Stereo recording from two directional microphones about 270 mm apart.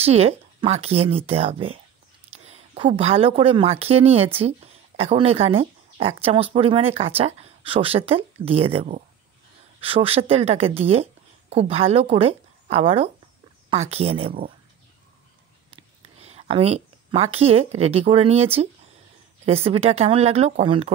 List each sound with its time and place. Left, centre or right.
0.0 s speech: right
15.7 s speech: right